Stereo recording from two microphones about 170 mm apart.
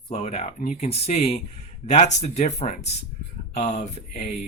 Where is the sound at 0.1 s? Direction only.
40° left (ahead or behind).